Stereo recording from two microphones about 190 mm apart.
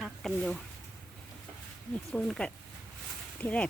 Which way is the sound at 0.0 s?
Centre (ahead or behind).